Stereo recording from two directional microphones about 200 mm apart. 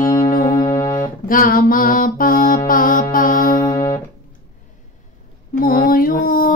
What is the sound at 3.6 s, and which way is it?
Music, 20° left (ahead or behind).